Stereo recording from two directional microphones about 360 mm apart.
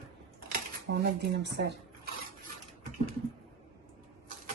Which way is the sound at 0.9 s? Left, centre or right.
Right.